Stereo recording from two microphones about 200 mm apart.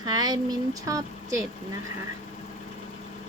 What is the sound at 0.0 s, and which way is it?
A woman's voice, 20° right (ahead or behind).